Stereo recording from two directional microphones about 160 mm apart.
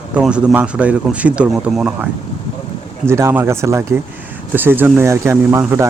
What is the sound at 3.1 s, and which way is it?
Speech, 15° right (ahead or behind).